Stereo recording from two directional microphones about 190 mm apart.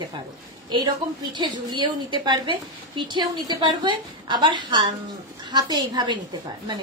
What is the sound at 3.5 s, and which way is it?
A woman's voice, 25° right (ahead or behind).